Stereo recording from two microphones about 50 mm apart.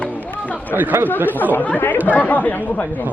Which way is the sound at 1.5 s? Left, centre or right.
Left.